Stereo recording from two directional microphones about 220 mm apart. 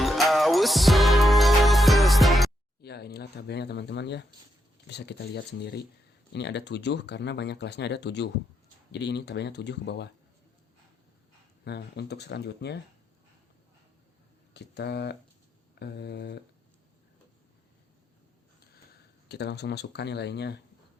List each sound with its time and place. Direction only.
0.0 s music: centre (ahead or behind)
2.8 s speech: 45° left (ahead or behind)
11.6 s speech: 50° left (ahead or behind)
14.5 s speech: 50° left (ahead or behind)
19.3 s speech: 50° left (ahead or behind)